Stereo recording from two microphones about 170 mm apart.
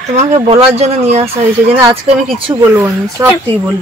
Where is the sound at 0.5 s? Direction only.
40° right (ahead or behind).